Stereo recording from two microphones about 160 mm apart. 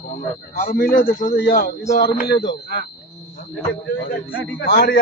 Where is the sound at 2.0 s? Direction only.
85° left.